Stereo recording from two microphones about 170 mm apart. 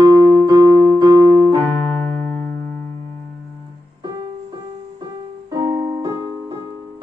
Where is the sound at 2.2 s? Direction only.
10° left (ahead or behind).